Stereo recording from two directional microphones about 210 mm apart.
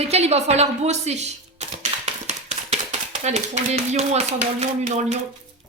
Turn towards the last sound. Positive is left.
turn(degrees=-35)  # may be behind; listen again after turning